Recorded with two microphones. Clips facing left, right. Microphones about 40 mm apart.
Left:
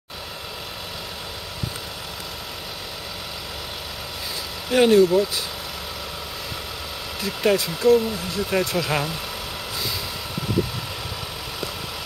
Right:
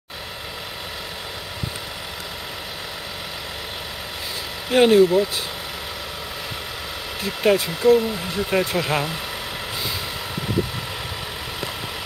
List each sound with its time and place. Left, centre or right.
4.6 s speech: centre
7.2 s speech: centre